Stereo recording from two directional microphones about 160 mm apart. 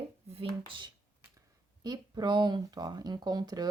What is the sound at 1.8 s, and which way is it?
Speech, 25° right (ahead or behind).